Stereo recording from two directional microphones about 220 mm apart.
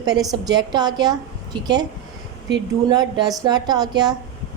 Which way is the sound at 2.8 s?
20° right (ahead or behind).